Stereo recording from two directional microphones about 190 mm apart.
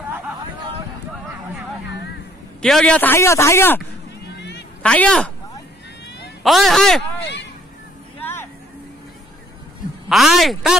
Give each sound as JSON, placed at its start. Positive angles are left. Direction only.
{"t": 2.6, "sound": "a man's voice", "side_deg": 5}
{"t": 4.4, "sound": "cat", "side_deg": 65}
{"t": 4.8, "sound": "speech", "side_deg": 5}
{"t": 6.0, "sound": "a sound", "side_deg": 65}
{"t": 6.4, "sound": "speech", "side_deg": 0}
{"t": 8.2, "sound": "vehicle", "side_deg": 10}
{"t": 10.0, "sound": "speech", "side_deg": 0}